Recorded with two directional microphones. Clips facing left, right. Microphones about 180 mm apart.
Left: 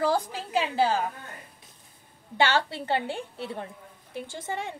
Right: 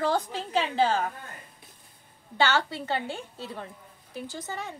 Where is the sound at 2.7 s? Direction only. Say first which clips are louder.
Left 2 dB; 30° left (ahead or behind).